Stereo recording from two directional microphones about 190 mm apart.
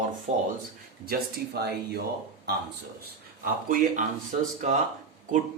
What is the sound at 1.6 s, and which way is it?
Speech, 60° right (ahead or behind).